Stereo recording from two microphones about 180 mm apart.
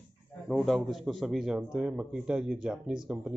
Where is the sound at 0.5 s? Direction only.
Centre (ahead or behind).